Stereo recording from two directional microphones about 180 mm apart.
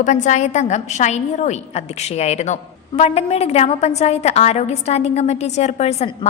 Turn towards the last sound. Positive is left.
turn(degrees=35)  # may be behind; listen again after turning